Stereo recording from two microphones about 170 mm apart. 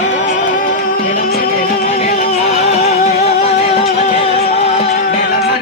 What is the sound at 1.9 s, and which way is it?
Music, 45° left (ahead or behind).